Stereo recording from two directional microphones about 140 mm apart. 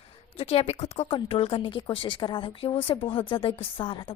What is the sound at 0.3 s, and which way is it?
A woman's voice, 45° left (ahead or behind).